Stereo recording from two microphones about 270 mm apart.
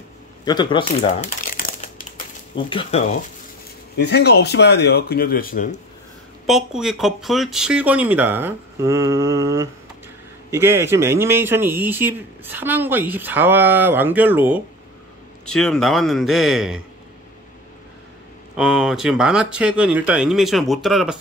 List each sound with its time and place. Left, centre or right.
0.5 s speech: centre
1.4 s crumpling: left
2.5 s speech: centre
3.9 s speech: left
6.4 s speech: centre
18.6 s speech: centre